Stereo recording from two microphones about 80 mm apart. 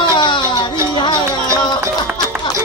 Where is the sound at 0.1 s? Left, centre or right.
Left.